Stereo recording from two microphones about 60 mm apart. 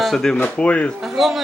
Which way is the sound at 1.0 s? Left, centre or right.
Centre.